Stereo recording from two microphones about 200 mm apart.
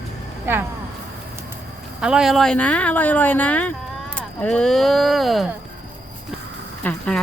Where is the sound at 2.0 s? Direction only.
5° right (ahead or behind).